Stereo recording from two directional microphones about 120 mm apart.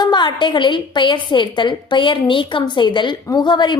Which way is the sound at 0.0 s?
40° left (ahead or behind).